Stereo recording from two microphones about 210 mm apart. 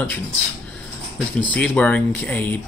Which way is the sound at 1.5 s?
5° left (ahead or behind).